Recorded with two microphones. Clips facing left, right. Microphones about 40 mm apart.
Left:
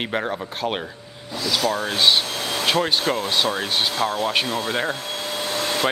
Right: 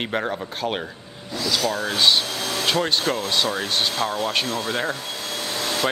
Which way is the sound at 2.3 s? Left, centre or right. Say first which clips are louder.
Left 1 dB; left.